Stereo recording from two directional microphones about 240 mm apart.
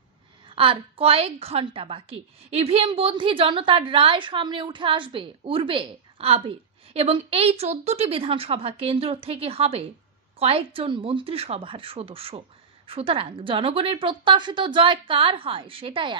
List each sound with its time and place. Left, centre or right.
0.6 s a woman's voice: right